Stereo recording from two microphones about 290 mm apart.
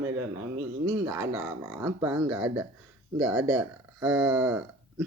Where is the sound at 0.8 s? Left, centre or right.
Centre.